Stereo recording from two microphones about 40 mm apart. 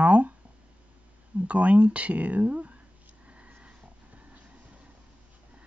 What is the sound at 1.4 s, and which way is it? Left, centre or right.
Speech, right.